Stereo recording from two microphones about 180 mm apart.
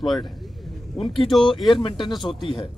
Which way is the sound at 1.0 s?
30° left (ahead or behind).